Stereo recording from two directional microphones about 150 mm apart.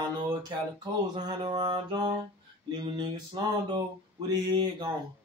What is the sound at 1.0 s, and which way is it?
A man's voice, 30° right (ahead or behind).